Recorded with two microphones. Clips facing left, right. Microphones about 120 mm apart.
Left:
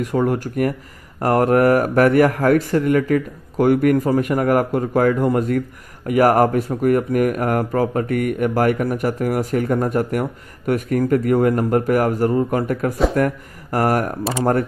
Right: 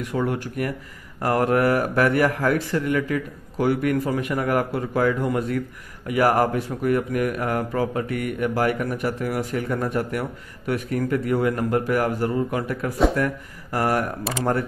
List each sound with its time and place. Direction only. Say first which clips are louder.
0.0 s speech: left 5 dB; 40° left (ahead or behind)